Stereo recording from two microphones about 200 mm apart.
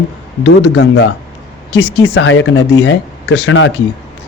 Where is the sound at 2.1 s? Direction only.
70° left (ahead or behind).